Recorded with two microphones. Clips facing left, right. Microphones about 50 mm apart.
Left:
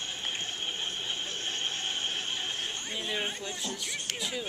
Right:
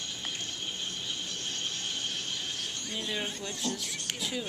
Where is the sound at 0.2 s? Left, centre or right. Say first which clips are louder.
Left 3 dB; left.